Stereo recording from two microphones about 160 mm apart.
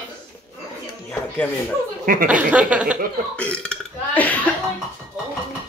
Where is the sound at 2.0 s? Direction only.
55° right (ahead or behind).